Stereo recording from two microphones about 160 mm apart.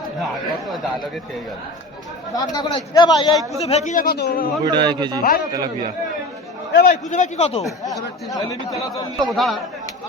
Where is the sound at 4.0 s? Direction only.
75° left (ahead or behind).